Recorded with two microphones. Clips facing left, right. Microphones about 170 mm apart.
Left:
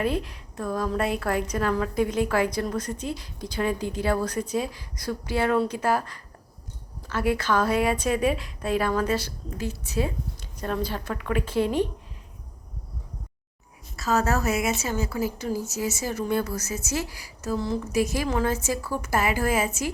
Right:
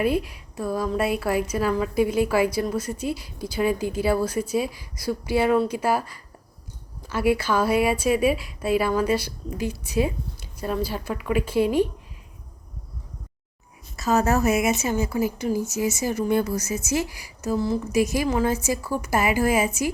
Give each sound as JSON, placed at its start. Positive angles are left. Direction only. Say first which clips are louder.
{"t": 0.0, "sound": "a woman's voice", "louder": "right 3 dB", "side_deg": -10}
{"t": 13.9, "sound": "a woman's voice", "louder": "right 3 dB", "side_deg": -20}